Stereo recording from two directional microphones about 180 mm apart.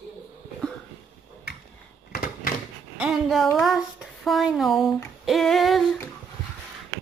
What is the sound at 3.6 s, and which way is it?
Speech, centre (ahead or behind).